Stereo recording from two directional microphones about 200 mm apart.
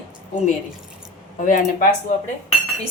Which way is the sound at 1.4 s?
40° left (ahead or behind).